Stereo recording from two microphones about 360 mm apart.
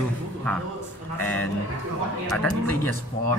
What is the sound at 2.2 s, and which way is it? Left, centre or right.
Speech, centre.